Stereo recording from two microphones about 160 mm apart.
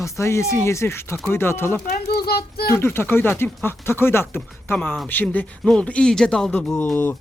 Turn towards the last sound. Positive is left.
turn(degrees=10)  # may be behind; listen again after turning